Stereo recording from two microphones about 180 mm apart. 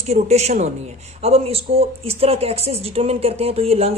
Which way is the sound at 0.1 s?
35° right (ahead or behind).